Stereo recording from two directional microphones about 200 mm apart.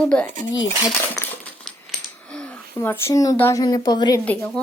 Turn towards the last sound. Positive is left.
turn(degrees=5)  # may be behind; listen again after turning